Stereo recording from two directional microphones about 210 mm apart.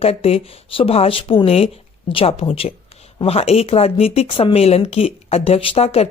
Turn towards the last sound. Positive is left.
turn(degrees=30)  # may be behind; listen again after turning